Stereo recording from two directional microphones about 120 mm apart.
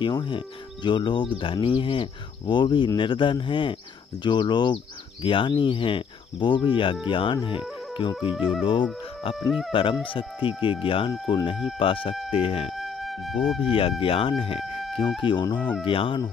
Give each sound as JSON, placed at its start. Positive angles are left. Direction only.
{"t": 0.0, "sound": "speech", "side_deg": 40}
{"t": 7.4, "sound": "music", "side_deg": 45}
{"t": 8.3, "sound": "speech", "side_deg": 0}
{"t": 9.7, "sound": "speech", "side_deg": 45}
{"t": 12.7, "sound": "music", "side_deg": 0}
{"t": 13.6, "sound": "speech", "side_deg": 50}